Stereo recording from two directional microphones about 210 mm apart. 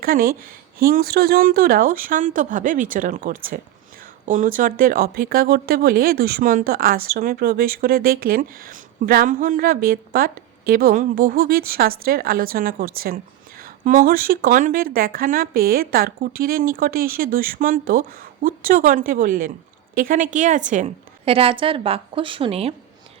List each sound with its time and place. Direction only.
0.0 s a woman's voice: 45° right (ahead or behind); by 22.7 s 25° right (ahead or behind)